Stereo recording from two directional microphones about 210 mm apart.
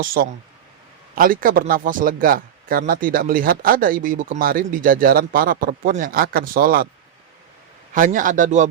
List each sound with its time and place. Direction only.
0.0 s speech: 40° right (ahead or behind)
7.9 s speech: 40° right (ahead or behind)